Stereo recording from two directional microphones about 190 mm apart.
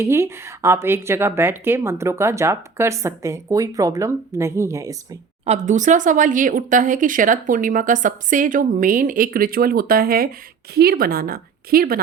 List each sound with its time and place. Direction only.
0.0 s a woman's voice: 15° right (ahead or behind)
5.5 s speech: 40° right (ahead or behind)